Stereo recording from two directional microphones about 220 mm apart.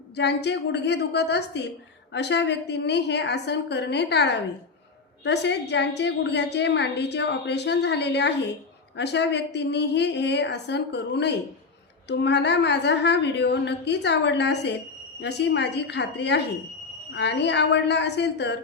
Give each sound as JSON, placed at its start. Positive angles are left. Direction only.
{"t": 0.2, "sound": "a woman's voice", "side_deg": 50}